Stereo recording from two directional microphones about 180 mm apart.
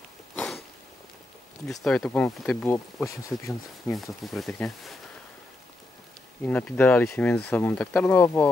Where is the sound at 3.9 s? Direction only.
Centre (ahead or behind).